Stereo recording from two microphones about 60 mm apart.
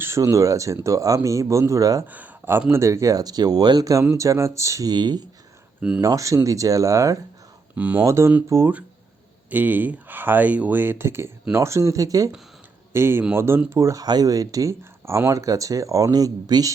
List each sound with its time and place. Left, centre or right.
0.2 s speech: right
2.0 s speech: right
2.7 s speech: right
4.2 s speech: right
7.8 s speech: right
8.0 s speech: right
9.5 s speech: right
12.9 s speech: right
13.7 s speech: right
14.7 s speech: right
15.3 s speech: right